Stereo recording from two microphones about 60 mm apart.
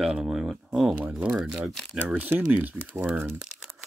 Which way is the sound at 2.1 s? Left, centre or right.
Right.